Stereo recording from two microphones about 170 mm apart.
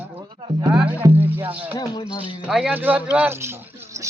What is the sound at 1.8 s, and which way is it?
Music, 25° left (ahead or behind).